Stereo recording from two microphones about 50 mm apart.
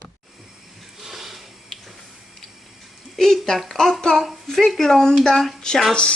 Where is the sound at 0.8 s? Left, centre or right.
Centre.